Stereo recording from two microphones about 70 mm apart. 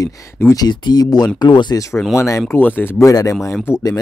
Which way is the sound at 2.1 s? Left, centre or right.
Left.